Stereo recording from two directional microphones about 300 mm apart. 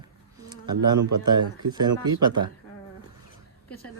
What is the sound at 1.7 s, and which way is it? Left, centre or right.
Speech, centre.